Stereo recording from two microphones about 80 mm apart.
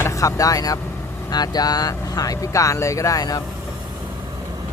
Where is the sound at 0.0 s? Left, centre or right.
Left.